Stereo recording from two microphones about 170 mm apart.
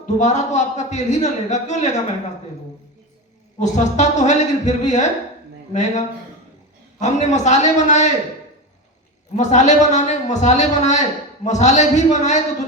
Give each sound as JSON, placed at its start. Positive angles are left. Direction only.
{"t": 0.0, "sound": "a man's voice", "side_deg": 45}
{"t": 3.6, "sound": "a man's voice", "side_deg": 45}
{"t": 9.3, "sound": "a man's voice", "side_deg": 45}